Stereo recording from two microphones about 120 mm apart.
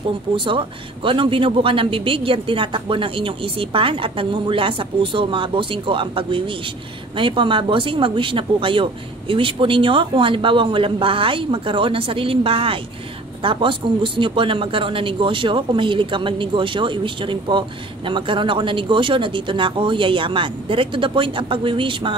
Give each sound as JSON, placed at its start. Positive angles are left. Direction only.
{"t": 0.4, "sound": "speech", "side_deg": -45}